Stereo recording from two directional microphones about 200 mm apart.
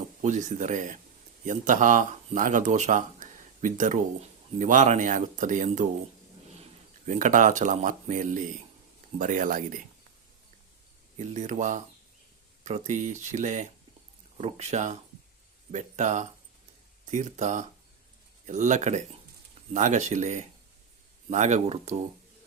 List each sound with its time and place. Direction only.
0.2 s speech: 35° right (ahead or behind)
7.1 s speech: 40° right (ahead or behind)
11.2 s speech: 35° right (ahead or behind)